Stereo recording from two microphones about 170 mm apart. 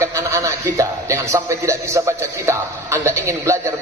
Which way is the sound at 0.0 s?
15° right (ahead or behind).